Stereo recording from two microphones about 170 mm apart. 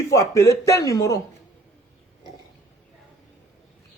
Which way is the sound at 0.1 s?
20° left (ahead or behind).